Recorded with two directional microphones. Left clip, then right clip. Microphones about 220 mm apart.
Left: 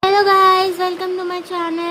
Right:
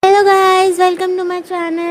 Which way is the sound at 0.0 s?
40° right (ahead or behind).